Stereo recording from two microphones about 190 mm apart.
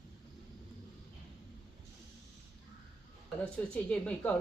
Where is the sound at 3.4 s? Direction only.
5° left (ahead or behind).